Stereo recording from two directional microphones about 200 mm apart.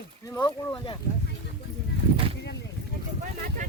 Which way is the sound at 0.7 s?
25° left (ahead or behind).